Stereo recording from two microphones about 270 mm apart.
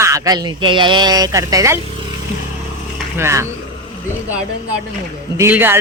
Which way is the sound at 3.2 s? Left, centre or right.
Centre.